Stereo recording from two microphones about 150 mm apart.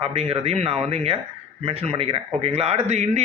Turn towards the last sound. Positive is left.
turn(degrees=-45)  # may be behind; listen again after turning